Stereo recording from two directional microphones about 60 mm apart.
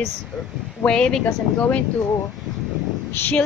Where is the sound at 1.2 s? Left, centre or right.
Left.